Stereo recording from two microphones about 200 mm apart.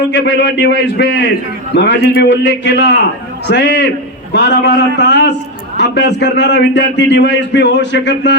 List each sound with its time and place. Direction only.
0.1 s a man's voice: 60° left (ahead or behind)